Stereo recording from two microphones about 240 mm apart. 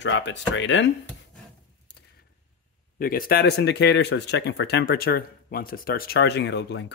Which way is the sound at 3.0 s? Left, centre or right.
Left.